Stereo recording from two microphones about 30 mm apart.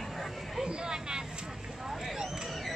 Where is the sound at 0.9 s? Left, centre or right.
Right.